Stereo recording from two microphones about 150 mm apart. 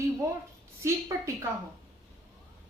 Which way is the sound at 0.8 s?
20° right (ahead or behind).